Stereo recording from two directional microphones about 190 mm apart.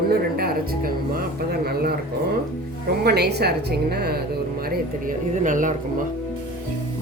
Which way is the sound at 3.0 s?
60° right (ahead or behind).